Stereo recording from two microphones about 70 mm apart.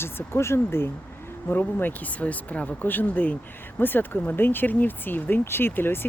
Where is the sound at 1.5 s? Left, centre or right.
Left.